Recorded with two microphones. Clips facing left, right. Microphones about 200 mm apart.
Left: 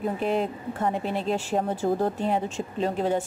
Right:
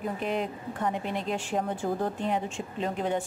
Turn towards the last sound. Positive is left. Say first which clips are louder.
# left 4 dB
turn(degrees=35)  # may be behind; listen again after turning